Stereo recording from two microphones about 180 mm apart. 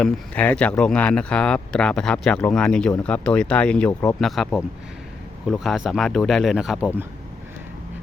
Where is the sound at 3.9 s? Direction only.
20° left (ahead or behind).